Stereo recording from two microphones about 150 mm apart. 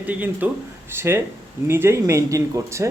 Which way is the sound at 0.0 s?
10° right (ahead or behind).